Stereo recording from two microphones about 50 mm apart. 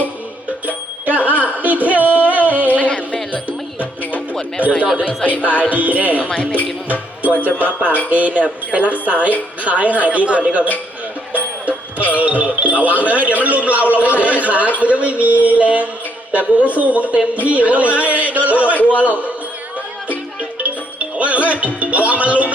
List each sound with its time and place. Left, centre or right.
1.0 s music: right
2.7 s music: left
4.6 s a man's voice: right
5.0 s music: left
5.7 s a man's voice: right
6.1 s speech: left
7.2 s a man's voice: right
8.1 s music: right
12.6 s a man's voice: right
14.8 s music: right
21.2 s music: right